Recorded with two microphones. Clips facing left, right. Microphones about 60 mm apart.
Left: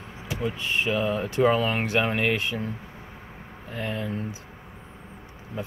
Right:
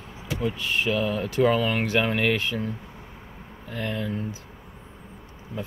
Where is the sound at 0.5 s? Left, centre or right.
Left.